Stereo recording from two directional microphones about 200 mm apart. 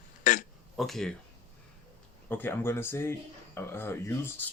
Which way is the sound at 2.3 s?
10° left (ahead or behind).